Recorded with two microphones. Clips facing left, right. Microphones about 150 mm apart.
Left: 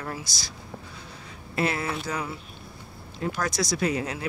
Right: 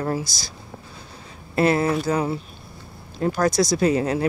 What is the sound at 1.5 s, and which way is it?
Speech, 35° right (ahead or behind).